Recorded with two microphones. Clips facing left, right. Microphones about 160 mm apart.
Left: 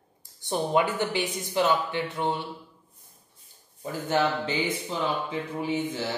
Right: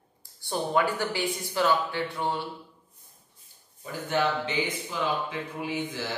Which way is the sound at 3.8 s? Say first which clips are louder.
Left 2 dB; 30° left (ahead or behind).